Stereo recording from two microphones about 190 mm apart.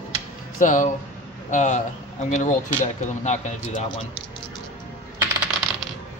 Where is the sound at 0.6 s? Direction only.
45° left (ahead or behind).